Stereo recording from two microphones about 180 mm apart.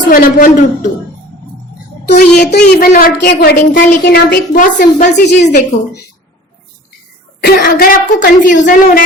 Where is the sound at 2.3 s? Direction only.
65° left (ahead or behind).